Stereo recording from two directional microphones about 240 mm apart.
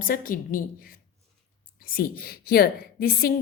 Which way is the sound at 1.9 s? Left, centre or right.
Left.